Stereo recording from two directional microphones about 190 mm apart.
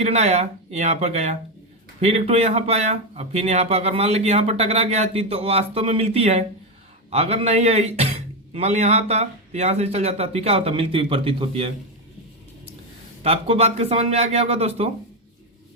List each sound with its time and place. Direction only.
0.0 s speech: 35° right (ahead or behind)
13.2 s speech: 30° right (ahead or behind)